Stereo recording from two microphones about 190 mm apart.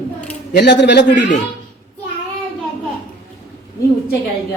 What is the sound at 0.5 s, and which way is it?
Speech, 65° left (ahead or behind).